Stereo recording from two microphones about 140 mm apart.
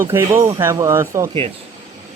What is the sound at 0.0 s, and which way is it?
Speech, 15° right (ahead or behind).